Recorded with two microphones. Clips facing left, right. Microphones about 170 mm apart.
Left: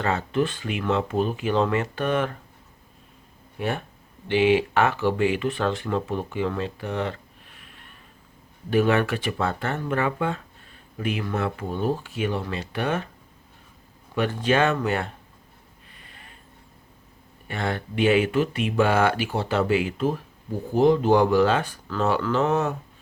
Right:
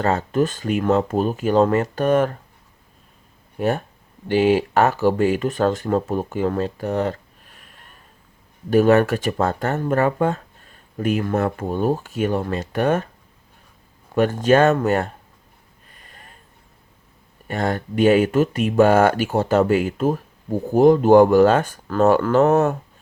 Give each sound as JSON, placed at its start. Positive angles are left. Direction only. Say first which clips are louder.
{"t": 0.0, "sound": "speech", "louder": "right 4 dB", "side_deg": -40}
{"t": 3.6, "sound": "speech", "louder": "right 6 dB", "side_deg": -40}
{"t": 14.2, "sound": "speech", "louder": "right 6 dB", "side_deg": -45}
{"t": 15.9, "sound": "a sound", "louder": "right 3 dB", "side_deg": -45}
{"t": 17.5, "sound": "speech", "louder": "right 5 dB", "side_deg": -40}